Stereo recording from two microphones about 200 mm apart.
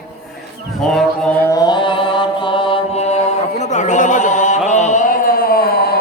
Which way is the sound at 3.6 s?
35° left (ahead or behind).